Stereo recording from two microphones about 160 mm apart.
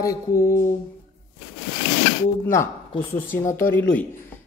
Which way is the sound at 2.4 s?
15° left (ahead or behind).